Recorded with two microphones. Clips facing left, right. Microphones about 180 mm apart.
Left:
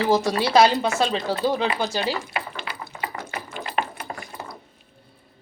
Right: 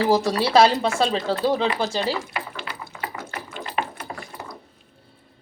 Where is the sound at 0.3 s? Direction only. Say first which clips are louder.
Even; 30° right (ahead or behind).